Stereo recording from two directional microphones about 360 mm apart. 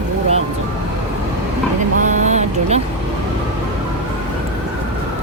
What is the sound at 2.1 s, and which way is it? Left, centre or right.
Vehicle, centre.